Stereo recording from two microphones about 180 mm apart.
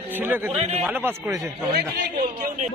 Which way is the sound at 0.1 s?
10° right (ahead or behind).